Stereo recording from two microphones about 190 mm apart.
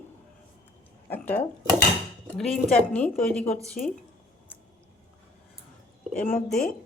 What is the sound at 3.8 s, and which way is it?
Speech, 45° left (ahead or behind).